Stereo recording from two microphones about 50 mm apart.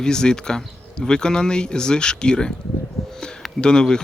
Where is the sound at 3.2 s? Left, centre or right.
Centre.